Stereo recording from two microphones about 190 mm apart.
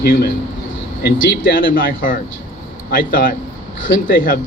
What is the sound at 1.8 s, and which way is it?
Speech, 50° left (ahead or behind).